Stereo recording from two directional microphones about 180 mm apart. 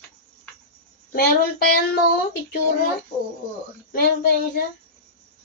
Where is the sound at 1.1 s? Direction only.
60° left (ahead or behind).